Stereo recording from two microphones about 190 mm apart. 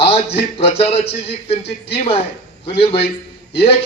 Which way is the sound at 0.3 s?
30° left (ahead or behind).